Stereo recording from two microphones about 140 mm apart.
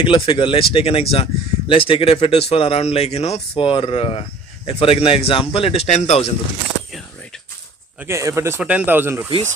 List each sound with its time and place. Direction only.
0.0 s speech: 40° left (ahead or behind)
8.0 s speech: 20° right (ahead or behind)